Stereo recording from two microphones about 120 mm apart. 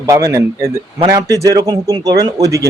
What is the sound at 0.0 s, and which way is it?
Speech, 25° right (ahead or behind).